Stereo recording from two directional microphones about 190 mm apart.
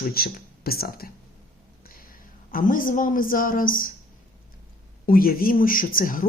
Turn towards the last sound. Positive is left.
turn(degrees=45)  # may be behind; listen again after turning